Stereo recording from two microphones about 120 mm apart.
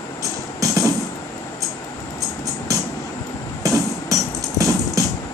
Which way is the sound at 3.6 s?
30° right (ahead or behind).